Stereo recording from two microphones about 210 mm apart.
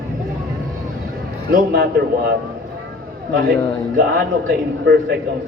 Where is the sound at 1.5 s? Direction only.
45° right (ahead or behind).